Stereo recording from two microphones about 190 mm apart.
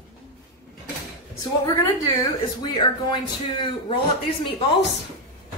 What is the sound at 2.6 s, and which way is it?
A man's voice, 25° left (ahead or behind).